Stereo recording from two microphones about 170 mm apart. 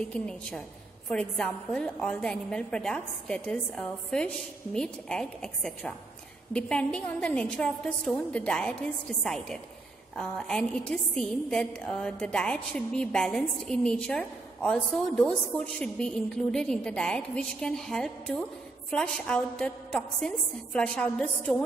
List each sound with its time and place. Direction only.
0.0 s a woman's voice: 5° left (ahead or behind)